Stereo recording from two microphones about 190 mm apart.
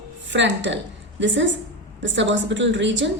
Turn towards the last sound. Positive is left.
turn(degrees=-75)  # may be behind; listen again after turning